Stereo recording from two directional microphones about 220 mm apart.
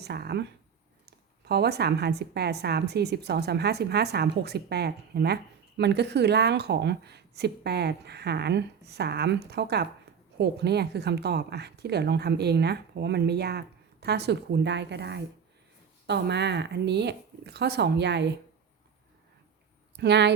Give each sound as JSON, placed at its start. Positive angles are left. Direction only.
{"t": 0.0, "sound": "speech", "side_deg": -50}
{"t": 1.5, "sound": "a woman's voice", "side_deg": -45}
{"t": 20.0, "sound": "a woman's voice", "side_deg": -50}